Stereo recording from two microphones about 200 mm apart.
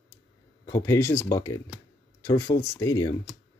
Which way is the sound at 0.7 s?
15° left (ahead or behind).